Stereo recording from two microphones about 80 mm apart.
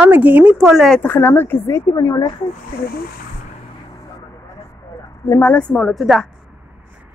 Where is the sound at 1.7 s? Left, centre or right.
Left.